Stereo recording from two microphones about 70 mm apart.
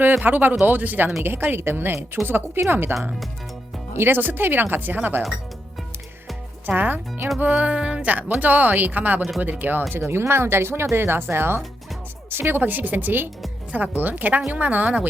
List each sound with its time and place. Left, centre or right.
0.0 s speech: right
3.9 s speech: right
6.7 s speech: right
9.9 s speech: right